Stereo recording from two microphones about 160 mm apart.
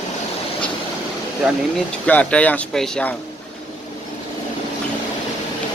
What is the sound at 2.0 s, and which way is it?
Speech, 10° left (ahead or behind).